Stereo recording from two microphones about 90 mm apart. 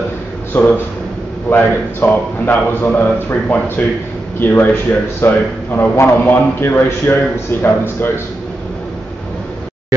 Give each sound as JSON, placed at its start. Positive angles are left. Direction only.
{"t": 0.5, "sound": "a man's voice", "side_deg": 25}